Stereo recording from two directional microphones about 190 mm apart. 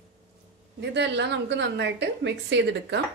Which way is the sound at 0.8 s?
65° right (ahead or behind).